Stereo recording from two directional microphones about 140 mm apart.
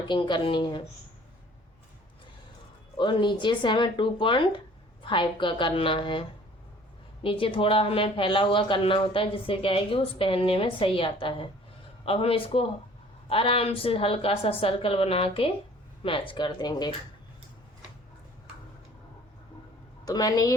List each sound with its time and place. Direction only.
0.1 s a woman's voice: 35° left (ahead or behind)
3.0 s a woman's voice: 35° left (ahead or behind)
20.1 s a woman's voice: 25° left (ahead or behind)